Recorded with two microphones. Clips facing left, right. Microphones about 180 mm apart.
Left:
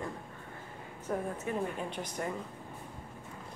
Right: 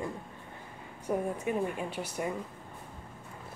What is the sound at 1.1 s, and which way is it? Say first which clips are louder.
A woman's voice: right 4 dB; 10° right (ahead or behind).